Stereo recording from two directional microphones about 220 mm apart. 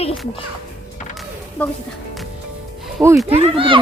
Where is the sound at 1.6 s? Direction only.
5° left (ahead or behind).